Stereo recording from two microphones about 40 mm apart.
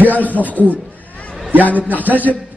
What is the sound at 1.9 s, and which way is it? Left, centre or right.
Speech, right.